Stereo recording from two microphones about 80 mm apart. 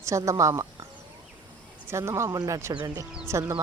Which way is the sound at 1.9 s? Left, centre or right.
Right.